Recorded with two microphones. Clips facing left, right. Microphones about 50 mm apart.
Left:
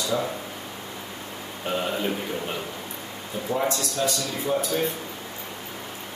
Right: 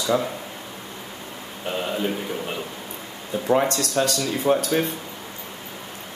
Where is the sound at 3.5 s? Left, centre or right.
Right.